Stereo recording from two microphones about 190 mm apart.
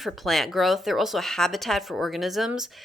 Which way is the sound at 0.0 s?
Centre (ahead or behind).